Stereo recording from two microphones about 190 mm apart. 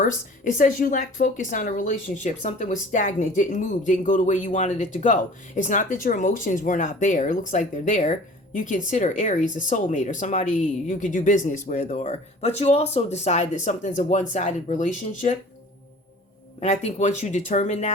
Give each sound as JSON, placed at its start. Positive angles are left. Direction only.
{"t": 0.5, "sound": "speech", "side_deg": 45}
{"t": 16.6, "sound": "speech", "side_deg": 40}